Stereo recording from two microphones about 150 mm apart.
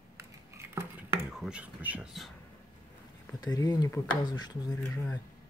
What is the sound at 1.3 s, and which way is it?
Speech, 5° right (ahead or behind).